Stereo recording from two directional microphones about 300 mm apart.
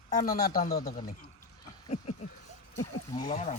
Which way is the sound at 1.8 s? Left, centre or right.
Left.